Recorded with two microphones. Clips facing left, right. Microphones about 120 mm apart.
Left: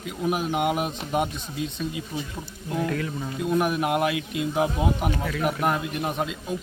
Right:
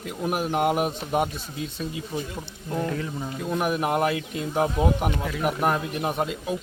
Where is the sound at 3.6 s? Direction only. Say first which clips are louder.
Right 3 dB; centre (ahead or behind).